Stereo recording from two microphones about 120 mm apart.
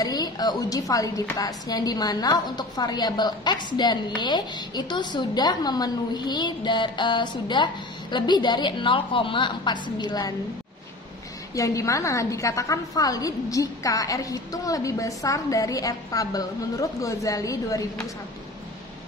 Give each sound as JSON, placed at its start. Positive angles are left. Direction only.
{"t": 0.0, "sound": "a woman's voice", "side_deg": 35}
{"t": 11.5, "sound": "a woman's voice", "side_deg": 25}